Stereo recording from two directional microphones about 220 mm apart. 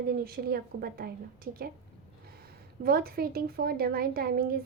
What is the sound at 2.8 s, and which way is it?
A woman's voice, 45° right (ahead or behind).